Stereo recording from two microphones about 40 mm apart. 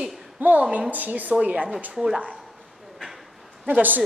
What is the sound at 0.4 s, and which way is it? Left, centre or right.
Speech, right.